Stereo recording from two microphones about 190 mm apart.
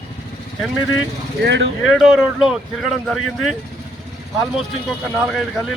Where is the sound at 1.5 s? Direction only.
70° right (ahead or behind).